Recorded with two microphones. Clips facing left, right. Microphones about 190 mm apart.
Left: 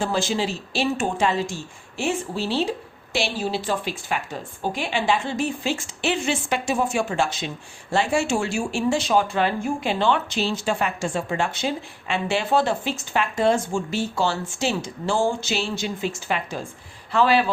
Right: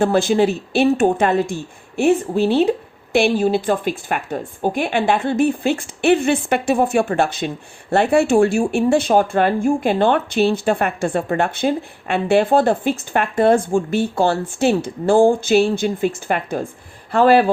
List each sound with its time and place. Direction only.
0.0 s a woman's voice: 60° right (ahead or behind)